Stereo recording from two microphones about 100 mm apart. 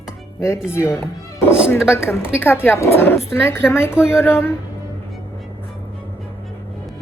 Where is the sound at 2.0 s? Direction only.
25° left (ahead or behind).